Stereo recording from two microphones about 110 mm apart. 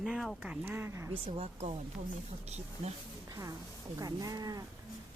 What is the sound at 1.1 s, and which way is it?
Speech, 60° right (ahead or behind).